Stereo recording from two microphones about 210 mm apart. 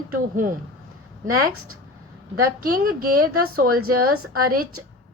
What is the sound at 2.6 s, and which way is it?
Speech, 45° right (ahead or behind).